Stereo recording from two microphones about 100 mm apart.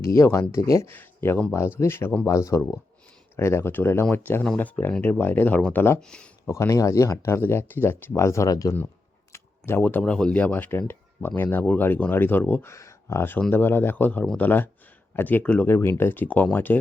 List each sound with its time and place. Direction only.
0.0 s speech: 35° left (ahead or behind)
6.0 s speech: 10° left (ahead or behind)
6.4 s speech: 25° left (ahead or behind)
9.3 s a sound: 25° left (ahead or behind)
10.0 s speech: 10° left (ahead or behind)
12.7 s speech: 30° left (ahead or behind)